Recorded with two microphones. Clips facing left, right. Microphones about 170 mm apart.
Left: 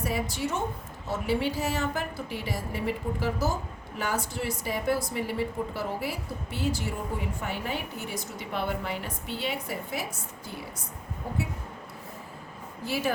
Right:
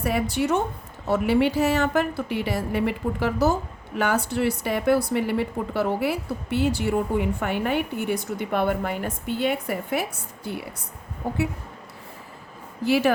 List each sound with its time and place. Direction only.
0.0 s a woman's voice: 65° right (ahead or behind)
11.2 s speech: 75° right (ahead or behind)
12.8 s speech: 75° right (ahead or behind)